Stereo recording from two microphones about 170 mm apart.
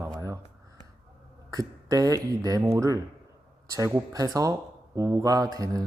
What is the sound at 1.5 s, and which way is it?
A man's voice, 20° right (ahead or behind).